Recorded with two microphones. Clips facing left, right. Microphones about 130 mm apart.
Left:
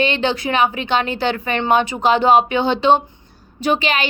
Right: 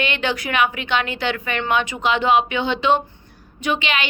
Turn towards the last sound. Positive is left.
turn(degrees=40)  # may be behind; listen again after turning